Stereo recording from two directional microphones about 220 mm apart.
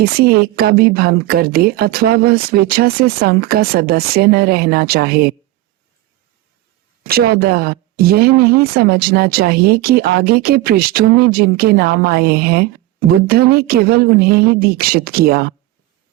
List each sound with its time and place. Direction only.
0.0 s speech: 45° right (ahead or behind)
7.0 s speech: 45° right (ahead or behind)